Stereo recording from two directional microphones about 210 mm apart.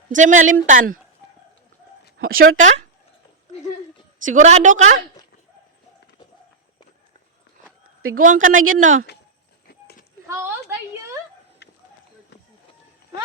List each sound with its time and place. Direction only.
0.1 s a woman's voice: 35° right (ahead or behind)
1.2 s a sound: 55° left (ahead or behind)
2.1 s a sound: 45° right (ahead or behind)
2.6 s a woman's voice: 35° right (ahead or behind)
4.3 s a woman's voice: 35° right (ahead or behind)
8.2 s a woman's voice: 40° right (ahead or behind)
8.5 s speech: 70° right (ahead or behind)
9.6 s clip-clop: 45° left (ahead or behind)
10.2 s a woman's voice: 10° right (ahead or behind)
11.6 s a sound: 50° left (ahead or behind)